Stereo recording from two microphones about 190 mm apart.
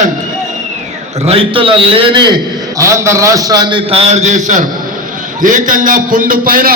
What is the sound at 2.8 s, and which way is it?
A man's voice, 15° right (ahead or behind).